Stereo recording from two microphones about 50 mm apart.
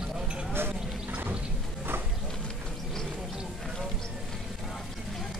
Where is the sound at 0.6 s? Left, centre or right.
Right.